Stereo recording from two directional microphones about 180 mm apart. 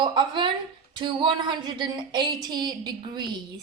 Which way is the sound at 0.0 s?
25° right (ahead or behind).